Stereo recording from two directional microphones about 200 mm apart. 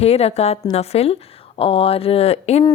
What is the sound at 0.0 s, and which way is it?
A woman's voice, 30° left (ahead or behind).